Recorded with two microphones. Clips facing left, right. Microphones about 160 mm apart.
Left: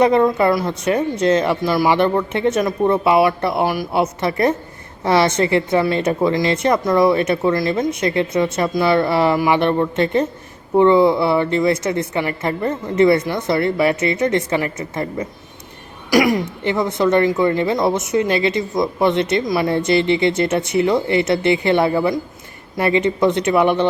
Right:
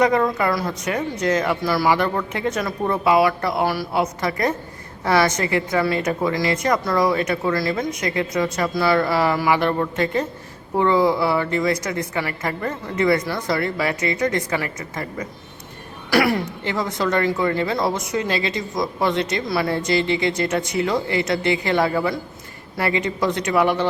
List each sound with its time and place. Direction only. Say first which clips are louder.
0.0 s a woman's voice: left 4 dB; 25° left (ahead or behind)
16.0 s a woman's voice: left 3 dB; 15° left (ahead or behind)